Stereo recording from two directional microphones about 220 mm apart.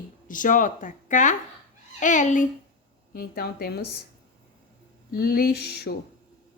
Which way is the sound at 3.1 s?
45° left (ahead or behind).